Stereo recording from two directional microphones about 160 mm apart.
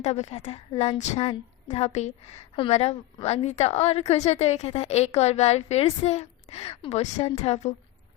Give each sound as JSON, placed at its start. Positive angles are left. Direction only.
{"t": 0.0, "sound": "a woman's voice", "side_deg": 45}